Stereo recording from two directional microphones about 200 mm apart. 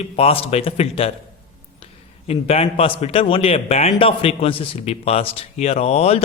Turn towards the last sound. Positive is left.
turn(degrees=30)  # may be behind; listen again after turning